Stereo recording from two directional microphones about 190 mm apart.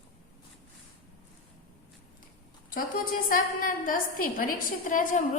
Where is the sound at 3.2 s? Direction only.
45° left (ahead or behind).